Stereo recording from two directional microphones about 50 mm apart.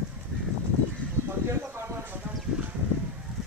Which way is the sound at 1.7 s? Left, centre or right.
Right.